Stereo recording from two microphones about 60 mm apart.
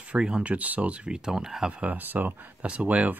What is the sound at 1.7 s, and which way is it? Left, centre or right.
Speech, right.